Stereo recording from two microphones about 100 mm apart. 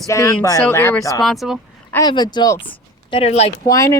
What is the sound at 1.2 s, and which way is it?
Speech, centre (ahead or behind).